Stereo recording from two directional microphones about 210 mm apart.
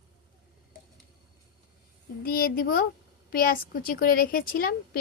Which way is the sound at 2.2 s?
45° left (ahead or behind).